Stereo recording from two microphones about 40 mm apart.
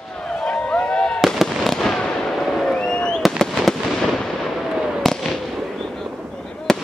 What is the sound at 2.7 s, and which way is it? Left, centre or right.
Fireworks, left.